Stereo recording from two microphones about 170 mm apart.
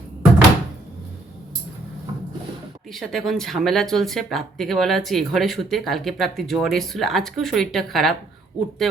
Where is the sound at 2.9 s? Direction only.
Centre (ahead or behind).